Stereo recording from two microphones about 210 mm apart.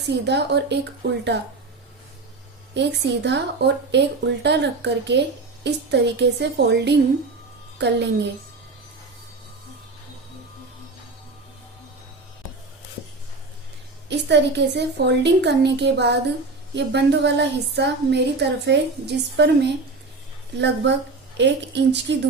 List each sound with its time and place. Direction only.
0.1 s a woman's voice: 55° right (ahead or behind)
2.7 s a woman's voice: 55° right (ahead or behind)
14.1 s a woman's voice: 55° right (ahead or behind)
21.3 s a woman's voice: 55° right (ahead or behind)